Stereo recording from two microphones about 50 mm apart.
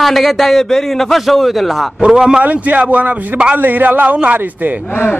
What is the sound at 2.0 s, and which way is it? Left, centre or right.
Speech, centre.